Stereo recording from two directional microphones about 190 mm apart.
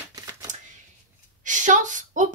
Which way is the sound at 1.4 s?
40° right (ahead or behind).